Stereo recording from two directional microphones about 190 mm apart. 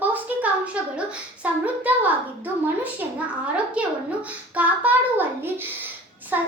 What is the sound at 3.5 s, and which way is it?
A child's voice, 5° right (ahead or behind).